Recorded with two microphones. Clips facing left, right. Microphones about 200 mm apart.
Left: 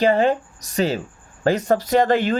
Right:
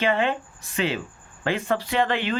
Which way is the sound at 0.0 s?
40° left (ahead or behind).